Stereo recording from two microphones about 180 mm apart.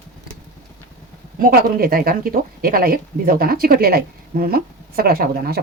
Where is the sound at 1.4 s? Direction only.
55° right (ahead or behind).